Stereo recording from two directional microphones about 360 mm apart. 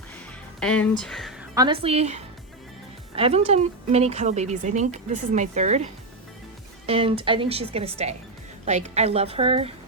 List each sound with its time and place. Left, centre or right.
0.6 s speech: centre
1.5 s speech: centre